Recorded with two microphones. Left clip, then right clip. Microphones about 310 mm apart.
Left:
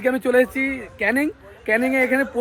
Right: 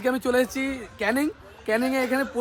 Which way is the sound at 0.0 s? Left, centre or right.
Centre.